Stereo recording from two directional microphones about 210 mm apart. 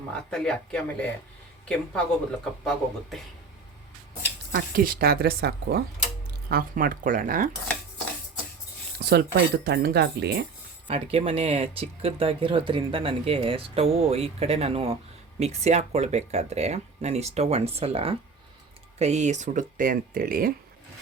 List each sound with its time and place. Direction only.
0.1 s speech: 5° left (ahead or behind)
4.5 s speech: 45° right (ahead or behind)
9.0 s speech: 50° right (ahead or behind)
10.8 s speech: 25° right (ahead or behind); by 20.5 s 45° right (ahead or behind)